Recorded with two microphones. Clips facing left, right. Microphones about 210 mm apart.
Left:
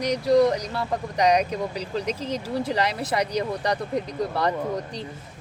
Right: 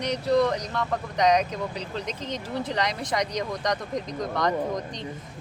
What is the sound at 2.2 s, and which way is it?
Speech, 35° left (ahead or behind).